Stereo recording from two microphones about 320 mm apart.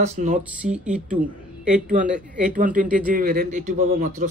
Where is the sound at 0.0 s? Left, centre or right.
Right.